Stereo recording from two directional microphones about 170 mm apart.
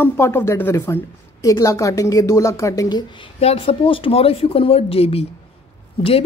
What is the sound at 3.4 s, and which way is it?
Speech, 35° left (ahead or behind).